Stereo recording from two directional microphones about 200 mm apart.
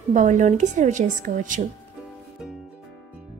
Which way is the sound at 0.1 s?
40° right (ahead or behind).